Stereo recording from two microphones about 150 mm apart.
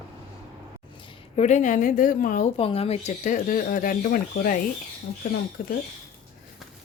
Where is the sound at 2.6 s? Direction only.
40° left (ahead or behind); by 4.6 s 70° left (ahead or behind).